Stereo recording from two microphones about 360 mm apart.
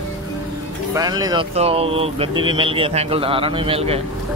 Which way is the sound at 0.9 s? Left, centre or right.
Centre.